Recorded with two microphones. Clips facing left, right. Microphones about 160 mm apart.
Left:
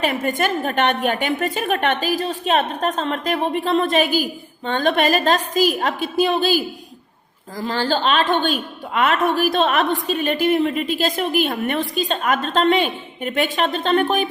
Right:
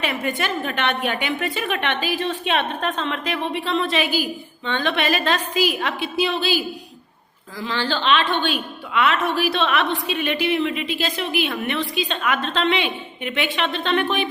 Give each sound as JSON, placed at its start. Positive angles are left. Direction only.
{"t": 0.0, "sound": "a woman's voice", "side_deg": 45}